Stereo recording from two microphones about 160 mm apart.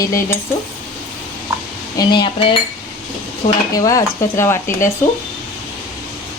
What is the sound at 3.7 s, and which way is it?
Speech, 20° left (ahead or behind).